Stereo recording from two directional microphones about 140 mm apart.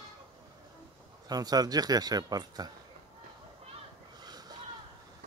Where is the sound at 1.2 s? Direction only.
30° right (ahead or behind).